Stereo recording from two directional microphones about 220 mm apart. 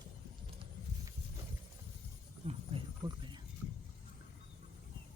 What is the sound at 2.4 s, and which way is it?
Wild animals, 25° right (ahead or behind).